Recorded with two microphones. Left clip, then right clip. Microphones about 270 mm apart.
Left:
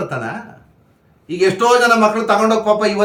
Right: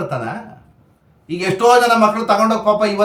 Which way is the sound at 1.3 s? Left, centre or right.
Centre.